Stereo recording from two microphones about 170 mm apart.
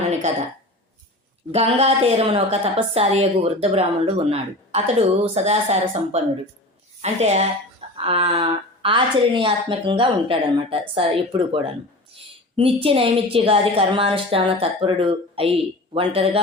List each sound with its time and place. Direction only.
1.5 s a woman's voice: 35° right (ahead or behind)